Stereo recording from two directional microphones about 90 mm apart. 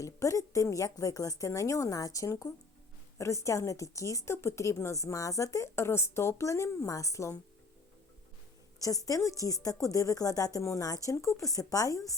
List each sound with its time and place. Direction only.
0.0 s a woman's voice: 35° left (ahead or behind)
8.8 s a woman's voice: 40° left (ahead or behind)